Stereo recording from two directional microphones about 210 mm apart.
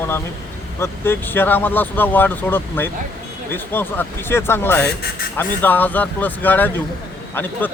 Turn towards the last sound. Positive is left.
turn(degrees=10)  # may be behind; listen again after turning